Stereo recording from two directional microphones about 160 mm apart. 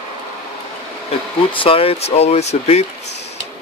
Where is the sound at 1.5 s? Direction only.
35° left (ahead or behind).